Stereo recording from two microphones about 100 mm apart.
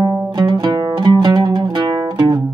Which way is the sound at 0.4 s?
45° right (ahead or behind).